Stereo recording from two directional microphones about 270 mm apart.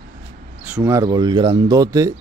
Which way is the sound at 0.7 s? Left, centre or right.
Centre.